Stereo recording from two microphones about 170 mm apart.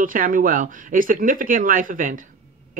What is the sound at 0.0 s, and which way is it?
A woman's voice, 55° right (ahead or behind).